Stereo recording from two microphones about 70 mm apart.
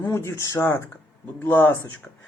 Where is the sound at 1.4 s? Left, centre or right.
Left.